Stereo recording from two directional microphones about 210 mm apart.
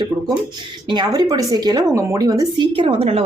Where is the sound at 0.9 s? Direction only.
20° right (ahead or behind).